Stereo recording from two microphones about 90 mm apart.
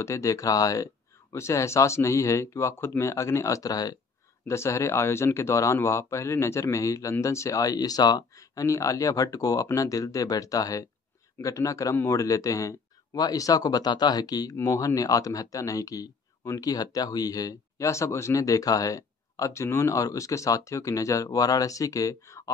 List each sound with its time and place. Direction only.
0.0 s speech: 35° left (ahead or behind)